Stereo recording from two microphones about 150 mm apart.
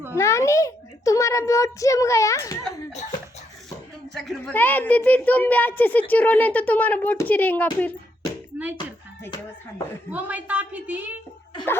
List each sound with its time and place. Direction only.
0.2 s a child's voice: 20° left (ahead or behind)
4.1 s speech: 5° left (ahead or behind)
8.5 s speech: 10° right (ahead or behind)
10.1 s a woman's voice: 10° right (ahead or behind)